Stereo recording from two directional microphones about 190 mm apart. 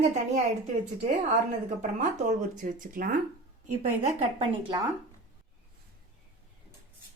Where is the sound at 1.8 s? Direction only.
40° right (ahead or behind).